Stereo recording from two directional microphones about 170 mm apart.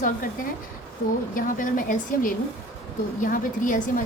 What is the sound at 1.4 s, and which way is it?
A woman's voice, 50° left (ahead or behind).